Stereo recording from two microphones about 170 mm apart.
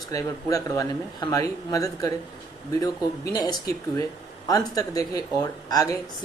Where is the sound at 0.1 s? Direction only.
20° left (ahead or behind).